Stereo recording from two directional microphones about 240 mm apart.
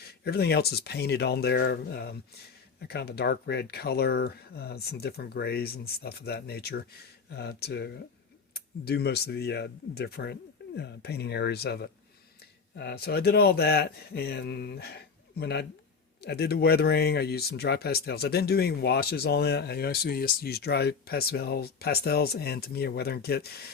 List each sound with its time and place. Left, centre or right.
0.3 s speech: left